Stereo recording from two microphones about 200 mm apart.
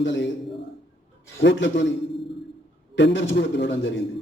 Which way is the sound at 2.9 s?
60° left (ahead or behind).